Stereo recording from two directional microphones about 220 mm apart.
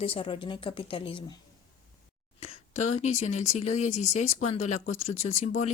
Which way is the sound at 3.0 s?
30° left (ahead or behind).